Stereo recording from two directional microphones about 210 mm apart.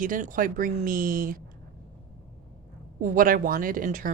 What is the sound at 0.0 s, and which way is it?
Speech, 40° right (ahead or behind).